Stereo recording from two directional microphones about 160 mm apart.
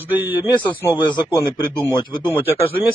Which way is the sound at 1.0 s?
30° left (ahead or behind).